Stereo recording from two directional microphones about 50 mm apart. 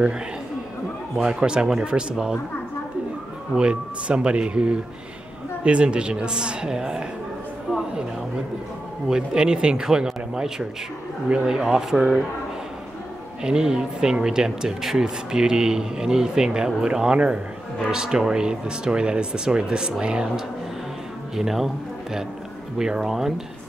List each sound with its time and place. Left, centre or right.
1.1 s speech: centre
3.5 s a woman's voice: right
9.0 s speech: centre
13.4 s speech: centre
21.4 s speech: centre